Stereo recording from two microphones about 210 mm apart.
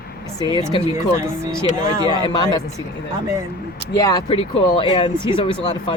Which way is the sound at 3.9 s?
15° left (ahead or behind).